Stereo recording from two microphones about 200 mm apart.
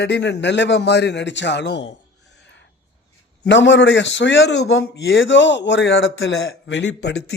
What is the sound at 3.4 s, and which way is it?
A man's voice, 65° left (ahead or behind).